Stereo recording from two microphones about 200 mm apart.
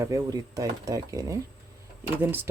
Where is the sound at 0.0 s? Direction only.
15° right (ahead or behind).